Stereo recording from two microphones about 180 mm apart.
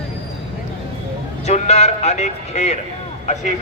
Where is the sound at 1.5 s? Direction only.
40° left (ahead or behind).